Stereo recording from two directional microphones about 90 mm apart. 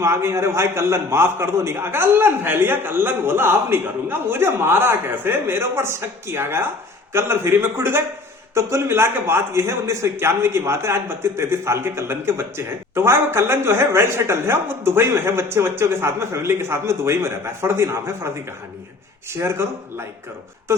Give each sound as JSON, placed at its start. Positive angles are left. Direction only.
{"t": 0.0, "sound": "a man's voice", "side_deg": -30}
{"t": 19.3, "sound": "a man's voice", "side_deg": -30}